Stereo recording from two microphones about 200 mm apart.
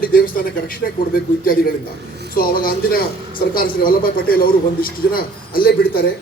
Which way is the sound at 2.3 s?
50° left (ahead or behind).